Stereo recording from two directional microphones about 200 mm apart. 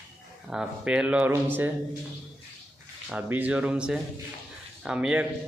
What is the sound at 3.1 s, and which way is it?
A man's voice, 5° right (ahead or behind).